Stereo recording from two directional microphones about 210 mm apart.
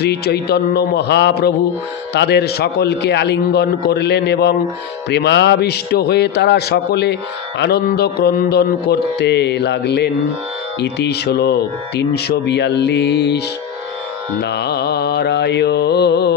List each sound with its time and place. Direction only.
0.0 s a man's voice: 50° left (ahead or behind)
14.4 s a man's voice: 50° left (ahead or behind)